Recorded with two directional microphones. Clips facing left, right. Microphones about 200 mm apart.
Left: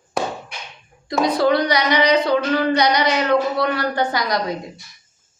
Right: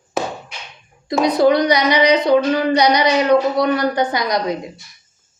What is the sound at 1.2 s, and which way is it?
Speech, 20° right (ahead or behind).